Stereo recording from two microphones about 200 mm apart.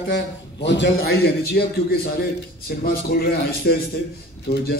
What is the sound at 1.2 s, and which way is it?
A man's voice, 50° left (ahead or behind).